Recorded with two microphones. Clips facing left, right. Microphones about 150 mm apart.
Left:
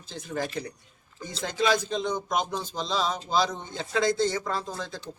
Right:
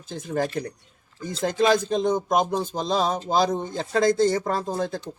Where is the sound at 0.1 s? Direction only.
45° right (ahead or behind).